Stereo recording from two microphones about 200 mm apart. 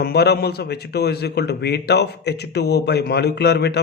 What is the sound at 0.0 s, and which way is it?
A man's voice, 55° left (ahead or behind).